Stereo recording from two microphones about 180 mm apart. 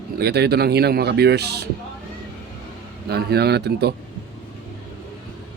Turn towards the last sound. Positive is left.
turn(degrees=-65)  # may be behind; listen again after turning